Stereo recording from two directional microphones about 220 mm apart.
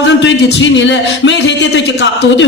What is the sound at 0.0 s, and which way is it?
A man's voice, 55° left (ahead or behind).